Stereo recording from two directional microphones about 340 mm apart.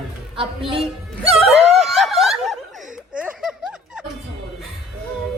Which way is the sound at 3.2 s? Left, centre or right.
Centre.